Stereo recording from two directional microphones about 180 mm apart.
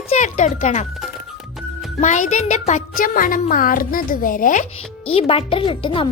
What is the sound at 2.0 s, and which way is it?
Music, 45° left (ahead or behind).